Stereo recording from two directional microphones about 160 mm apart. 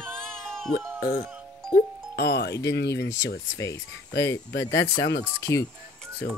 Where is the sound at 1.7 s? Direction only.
60° left (ahead or behind).